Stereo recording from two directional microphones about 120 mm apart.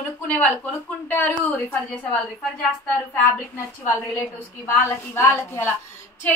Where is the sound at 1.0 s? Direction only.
15° left (ahead or behind).